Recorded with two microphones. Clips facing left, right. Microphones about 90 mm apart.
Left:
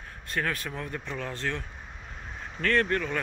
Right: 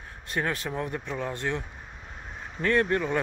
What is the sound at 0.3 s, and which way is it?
Speech, 20° right (ahead or behind).